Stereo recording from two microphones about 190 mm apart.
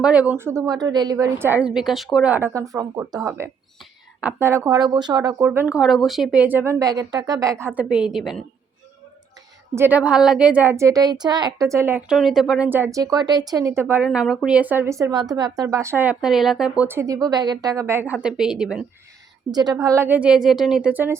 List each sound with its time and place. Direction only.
0.0 s a woman's voice: 5° right (ahead or behind)
5.5 s a woman's voice: 5° right (ahead or behind)
7.8 s a woman's voice: 5° right (ahead or behind)
9.7 s a woman's voice: 10° right (ahead or behind)
19.5 s a woman's voice: 20° right (ahead or behind)